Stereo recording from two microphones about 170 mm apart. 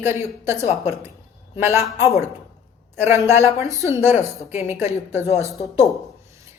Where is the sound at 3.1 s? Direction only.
15° right (ahead or behind).